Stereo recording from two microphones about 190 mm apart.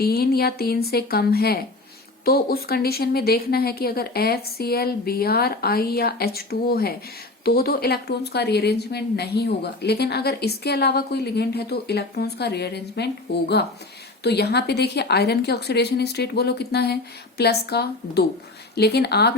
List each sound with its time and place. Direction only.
0.0 s a woman's voice: 55° left (ahead or behind)